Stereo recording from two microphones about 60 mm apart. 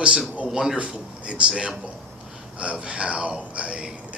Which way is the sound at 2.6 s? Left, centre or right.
Centre.